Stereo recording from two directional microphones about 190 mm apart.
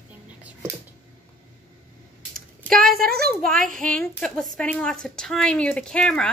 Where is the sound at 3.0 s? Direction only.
55° right (ahead or behind).